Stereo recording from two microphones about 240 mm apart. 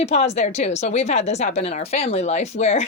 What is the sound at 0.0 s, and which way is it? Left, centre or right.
Speech, left.